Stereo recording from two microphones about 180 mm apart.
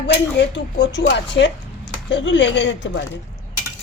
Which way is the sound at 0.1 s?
75° left (ahead or behind).